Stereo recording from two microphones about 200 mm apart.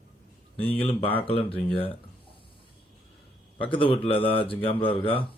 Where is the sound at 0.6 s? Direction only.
30° left (ahead or behind).